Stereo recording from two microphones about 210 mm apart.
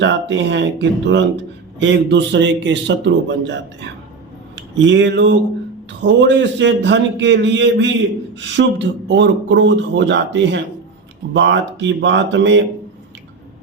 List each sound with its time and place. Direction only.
0.0 s speech: 60° right (ahead or behind)